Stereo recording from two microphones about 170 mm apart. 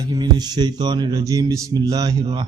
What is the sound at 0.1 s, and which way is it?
A man's voice, 25° right (ahead or behind).